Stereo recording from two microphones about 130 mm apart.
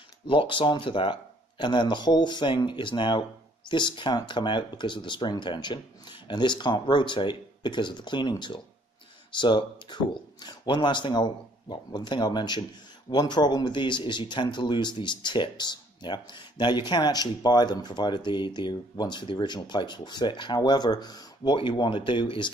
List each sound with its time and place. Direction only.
0.3 s speech: 40° left (ahead or behind)